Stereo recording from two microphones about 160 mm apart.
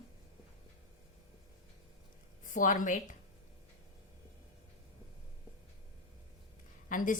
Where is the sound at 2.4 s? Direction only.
55° left (ahead or behind).